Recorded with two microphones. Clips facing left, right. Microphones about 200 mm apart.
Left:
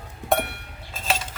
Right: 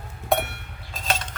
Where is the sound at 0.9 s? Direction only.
5° left (ahead or behind).